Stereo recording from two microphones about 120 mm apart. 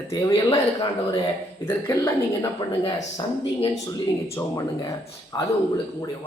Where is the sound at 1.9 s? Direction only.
25° left (ahead or behind).